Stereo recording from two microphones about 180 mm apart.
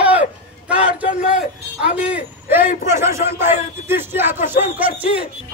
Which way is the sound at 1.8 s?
5° right (ahead or behind).